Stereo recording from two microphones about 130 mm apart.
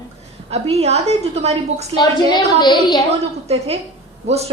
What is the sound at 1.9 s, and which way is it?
A woman's voice, 35° left (ahead or behind).